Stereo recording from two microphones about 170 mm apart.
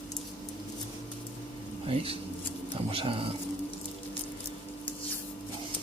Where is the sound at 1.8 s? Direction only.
35° right (ahead or behind).